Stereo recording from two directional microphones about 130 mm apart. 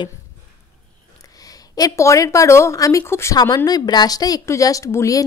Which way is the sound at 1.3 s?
30° left (ahead or behind).